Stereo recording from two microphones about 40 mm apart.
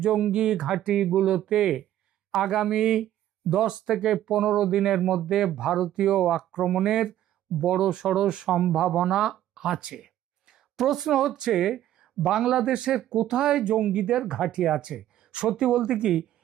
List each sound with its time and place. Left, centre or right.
0.1 s speech: right
1.0 s speech: centre
9.6 s a sound: centre
11.4 s speech: centre